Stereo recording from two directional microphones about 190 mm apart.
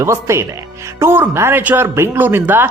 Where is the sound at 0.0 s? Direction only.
15° right (ahead or behind).